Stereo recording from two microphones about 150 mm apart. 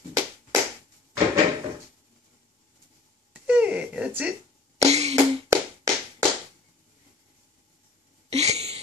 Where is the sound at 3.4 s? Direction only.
10° right (ahead or behind).